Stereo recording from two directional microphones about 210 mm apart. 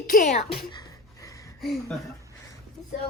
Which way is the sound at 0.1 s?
35° left (ahead or behind).